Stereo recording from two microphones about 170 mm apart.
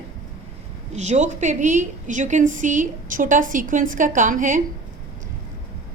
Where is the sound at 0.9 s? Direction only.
45° right (ahead or behind).